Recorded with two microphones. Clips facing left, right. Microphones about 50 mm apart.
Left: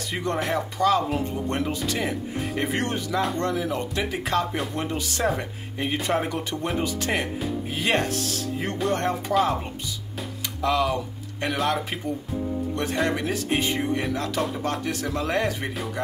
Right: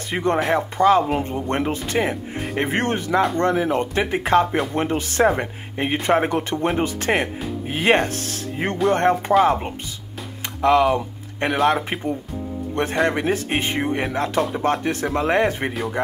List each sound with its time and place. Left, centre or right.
0.1 s speech: right
12.7 s speech: right